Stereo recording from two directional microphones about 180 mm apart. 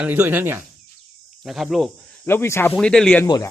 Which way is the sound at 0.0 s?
10° right (ahead or behind).